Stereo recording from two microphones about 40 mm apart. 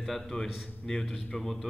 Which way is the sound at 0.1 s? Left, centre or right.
Centre.